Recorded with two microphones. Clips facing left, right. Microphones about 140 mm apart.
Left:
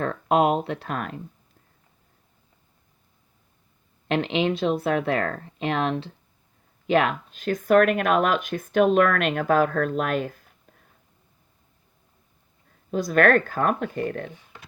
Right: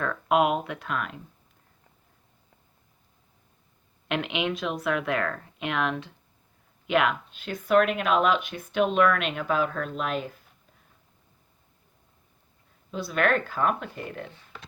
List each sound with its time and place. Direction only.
0.0 s speech: 30° left (ahead or behind)
4.1 s speech: 35° left (ahead or behind); by 10.8 s 50° left (ahead or behind)
12.9 s speech: 45° left (ahead or behind)